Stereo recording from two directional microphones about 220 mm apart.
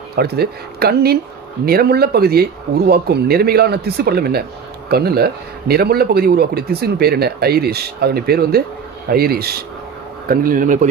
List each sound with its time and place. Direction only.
0.1 s a man's voice: 45° right (ahead or behind)